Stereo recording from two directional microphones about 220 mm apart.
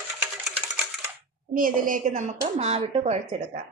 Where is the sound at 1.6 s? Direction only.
40° right (ahead or behind).